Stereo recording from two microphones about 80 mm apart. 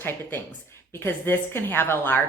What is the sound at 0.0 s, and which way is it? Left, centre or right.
A woman's voice, left.